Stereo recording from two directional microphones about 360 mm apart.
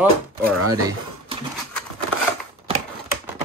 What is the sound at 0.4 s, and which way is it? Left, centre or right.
Speech, right.